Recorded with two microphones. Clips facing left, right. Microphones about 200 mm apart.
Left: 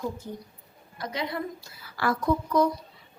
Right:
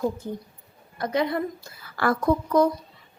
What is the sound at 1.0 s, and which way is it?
A woman's voice, 50° right (ahead or behind).